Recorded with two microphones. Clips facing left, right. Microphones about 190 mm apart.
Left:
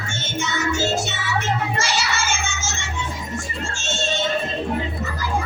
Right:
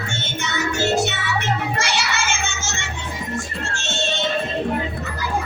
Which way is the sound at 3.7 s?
60° right (ahead or behind).